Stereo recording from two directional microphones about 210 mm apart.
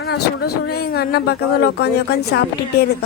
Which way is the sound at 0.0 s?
50° left (ahead or behind).